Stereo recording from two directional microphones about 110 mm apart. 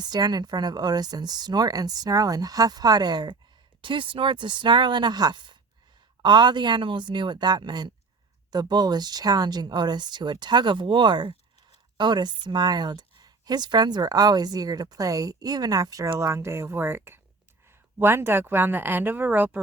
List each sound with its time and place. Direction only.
0.0 s speech: 40° right (ahead or behind)
3.8 s speech: 50° right (ahead or behind); by 19.6 s 15° right (ahead or behind)